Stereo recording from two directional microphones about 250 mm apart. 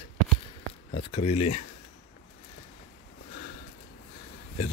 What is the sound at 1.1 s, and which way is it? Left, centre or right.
Speech, left.